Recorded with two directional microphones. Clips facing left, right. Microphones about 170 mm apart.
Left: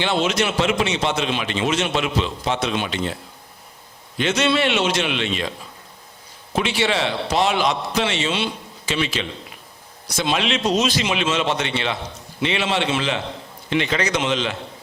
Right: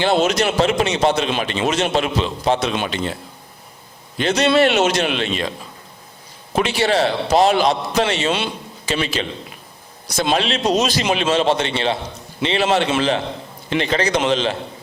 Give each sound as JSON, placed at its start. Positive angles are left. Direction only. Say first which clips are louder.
{"t": 0.0, "sound": "a man's voice", "louder": "right 4 dB", "side_deg": -40}
{"t": 4.2, "sound": "a man's voice", "louder": "right 4 dB", "side_deg": -35}
{"t": 6.6, "sound": "a man's voice", "louder": "right 4 dB", "side_deg": -40}
{"t": 12.6, "sound": "a man's voice", "louder": "right 8 dB", "side_deg": -45}